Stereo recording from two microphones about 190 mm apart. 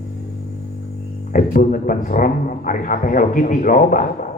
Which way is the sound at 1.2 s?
45° left (ahead or behind).